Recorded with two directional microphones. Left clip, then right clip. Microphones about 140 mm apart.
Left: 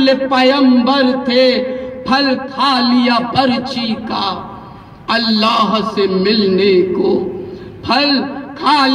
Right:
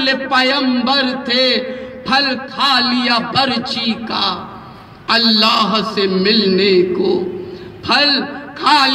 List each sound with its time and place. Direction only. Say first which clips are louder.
0.0 s a man's voice: left 3 dB; 30° left (ahead or behind)